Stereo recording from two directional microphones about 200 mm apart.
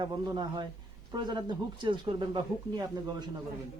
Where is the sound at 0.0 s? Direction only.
20° right (ahead or behind).